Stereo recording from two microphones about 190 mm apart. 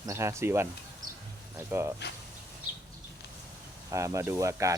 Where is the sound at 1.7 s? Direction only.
15° right (ahead or behind).